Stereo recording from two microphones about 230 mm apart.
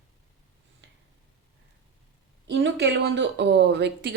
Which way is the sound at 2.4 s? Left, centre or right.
Right.